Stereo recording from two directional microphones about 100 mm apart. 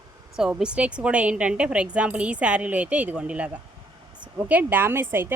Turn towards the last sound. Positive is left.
turn(degrees=-25)  # may be behind; listen again after turning